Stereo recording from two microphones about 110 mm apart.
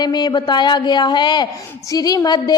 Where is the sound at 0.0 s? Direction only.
40° left (ahead or behind).